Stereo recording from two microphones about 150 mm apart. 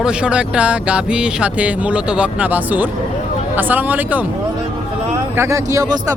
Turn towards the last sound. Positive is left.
turn(degrees=-20)  # may be behind; listen again after turning